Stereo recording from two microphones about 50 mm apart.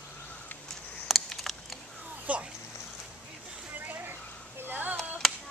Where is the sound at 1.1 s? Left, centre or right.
Centre.